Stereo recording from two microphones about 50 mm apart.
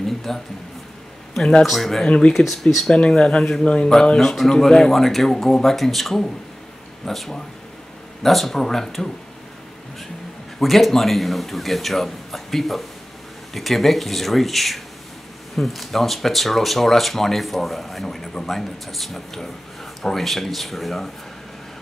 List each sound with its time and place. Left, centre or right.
0.0 s a sound: centre
1.6 s speech: centre
2.9 s speech: centre
4.2 s speech: centre
10.6 s speech: centre